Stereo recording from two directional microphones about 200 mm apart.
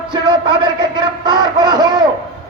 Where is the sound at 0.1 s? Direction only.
20° right (ahead or behind).